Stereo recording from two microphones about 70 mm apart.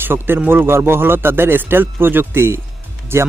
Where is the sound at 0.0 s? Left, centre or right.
Right.